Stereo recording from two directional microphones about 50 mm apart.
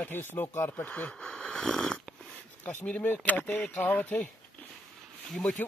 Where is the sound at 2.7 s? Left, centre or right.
Left.